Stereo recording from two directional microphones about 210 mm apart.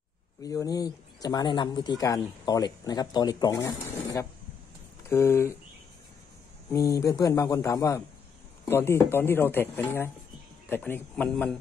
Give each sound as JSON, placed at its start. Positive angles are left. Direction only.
{"t": 0.4, "sound": "speech", "side_deg": 15}
{"t": 6.7, "sound": "a man's voice", "side_deg": 15}